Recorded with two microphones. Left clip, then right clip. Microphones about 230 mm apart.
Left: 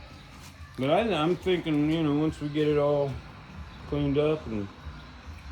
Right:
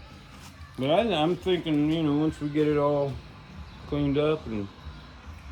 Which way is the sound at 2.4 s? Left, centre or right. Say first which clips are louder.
Right 1 dB; right.